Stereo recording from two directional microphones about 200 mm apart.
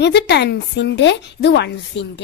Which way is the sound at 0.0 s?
55° left (ahead or behind).